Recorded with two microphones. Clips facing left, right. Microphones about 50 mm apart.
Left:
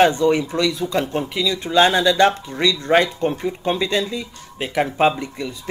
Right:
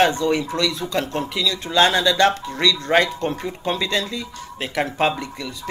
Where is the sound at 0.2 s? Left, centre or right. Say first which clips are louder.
Left 3 dB; left.